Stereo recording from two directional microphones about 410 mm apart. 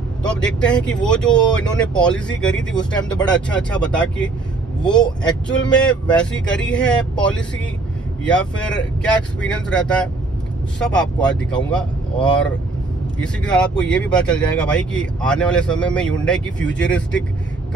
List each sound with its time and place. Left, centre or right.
0.2 s speech: centre
5.5 s speech: centre